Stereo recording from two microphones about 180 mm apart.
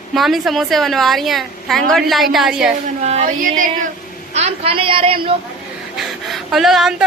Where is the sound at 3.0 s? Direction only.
35° right (ahead or behind).